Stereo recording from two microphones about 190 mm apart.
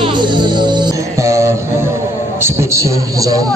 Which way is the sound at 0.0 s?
25° right (ahead or behind).